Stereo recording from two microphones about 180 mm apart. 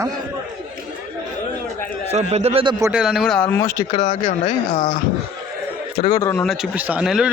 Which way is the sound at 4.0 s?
45° left (ahead or behind).